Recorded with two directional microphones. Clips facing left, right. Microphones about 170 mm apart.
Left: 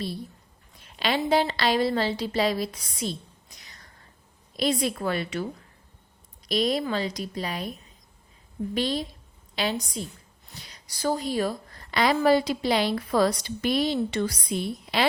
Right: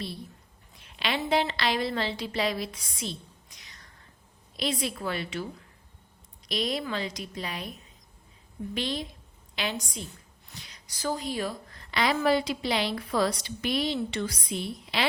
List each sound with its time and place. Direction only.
0.9 s a woman's voice: 40° left (ahead or behind)
4.5 s a woman's voice: 40° left (ahead or behind)
6.5 s a woman's voice: 40° left (ahead or behind)
8.7 s a woman's voice: 40° left (ahead or behind)